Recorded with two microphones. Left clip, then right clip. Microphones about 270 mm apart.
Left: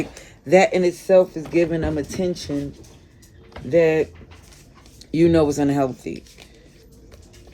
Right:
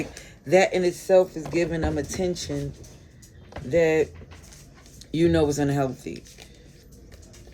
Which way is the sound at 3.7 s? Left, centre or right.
Left.